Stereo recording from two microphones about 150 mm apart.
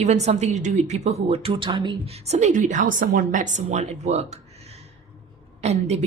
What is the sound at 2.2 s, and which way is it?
A woman's voice, 50° right (ahead or behind).